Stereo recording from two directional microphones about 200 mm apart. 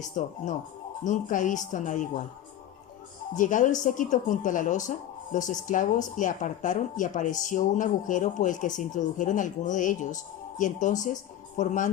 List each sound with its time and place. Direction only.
0.0 s speech: 40° left (ahead or behind)
3.3 s speech: 40° left (ahead or behind)